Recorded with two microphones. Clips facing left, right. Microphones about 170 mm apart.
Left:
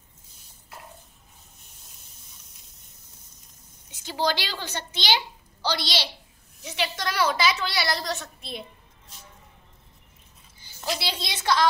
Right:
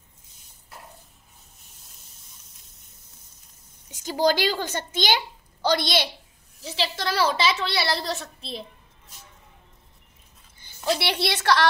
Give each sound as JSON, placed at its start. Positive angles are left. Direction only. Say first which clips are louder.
{"t": 3.9, "sound": "a woman's voice", "louder": "right 5 dB", "side_deg": -45}
{"t": 6.6, "sound": "a woman's voice", "louder": "right 1 dB", "side_deg": -30}
{"t": 11.0, "sound": "a woman's voice", "louder": "right 7 dB", "side_deg": -65}